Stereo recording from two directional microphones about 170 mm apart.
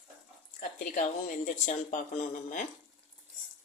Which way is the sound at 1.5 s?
45° left (ahead or behind).